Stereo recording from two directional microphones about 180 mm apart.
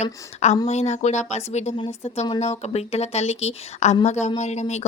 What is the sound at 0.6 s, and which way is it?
Speech, 40° left (ahead or behind).